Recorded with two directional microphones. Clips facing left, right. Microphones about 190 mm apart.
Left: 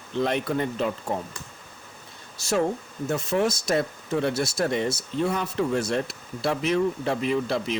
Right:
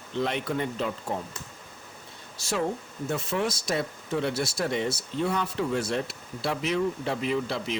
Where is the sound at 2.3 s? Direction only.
45° left (ahead or behind).